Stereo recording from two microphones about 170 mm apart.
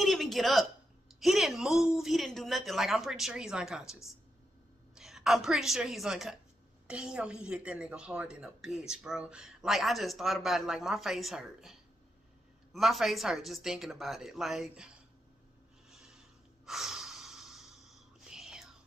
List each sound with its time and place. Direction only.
0.0 s a sound: centre (ahead or behind)
2.0 s a woman's voice: centre (ahead or behind)
16.6 s snort: centre (ahead or behind)